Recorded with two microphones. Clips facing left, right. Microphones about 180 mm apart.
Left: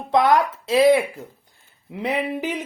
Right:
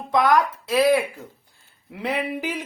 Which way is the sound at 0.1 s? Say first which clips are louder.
Left 2 dB; 25° left (ahead or behind).